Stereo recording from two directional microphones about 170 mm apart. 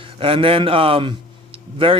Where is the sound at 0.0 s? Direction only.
30° right (ahead or behind).